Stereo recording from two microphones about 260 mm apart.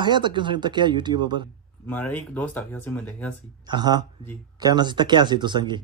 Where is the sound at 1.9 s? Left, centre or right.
Centre.